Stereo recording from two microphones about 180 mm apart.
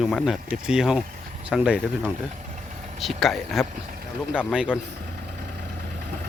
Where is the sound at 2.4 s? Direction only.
40° right (ahead or behind).